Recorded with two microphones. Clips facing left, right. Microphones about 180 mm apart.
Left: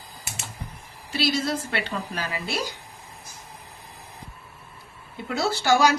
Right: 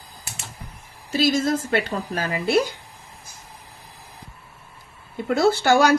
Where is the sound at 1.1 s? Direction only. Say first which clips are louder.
Right 5 dB; 45° right (ahead or behind).